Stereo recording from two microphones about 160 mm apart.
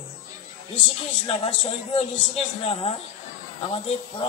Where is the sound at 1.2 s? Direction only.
35° left (ahead or behind).